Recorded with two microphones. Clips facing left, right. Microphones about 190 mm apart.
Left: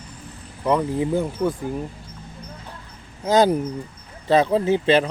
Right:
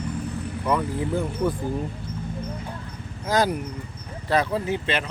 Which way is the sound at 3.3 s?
25° left (ahead or behind).